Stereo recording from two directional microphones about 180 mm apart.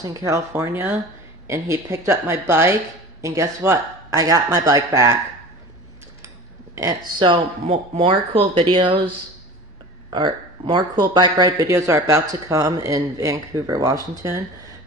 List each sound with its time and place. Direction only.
0.0 s a man's voice: 20° right (ahead or behind)
6.2 s speech: 15° right (ahead or behind)
10.1 s speech: 25° right (ahead or behind)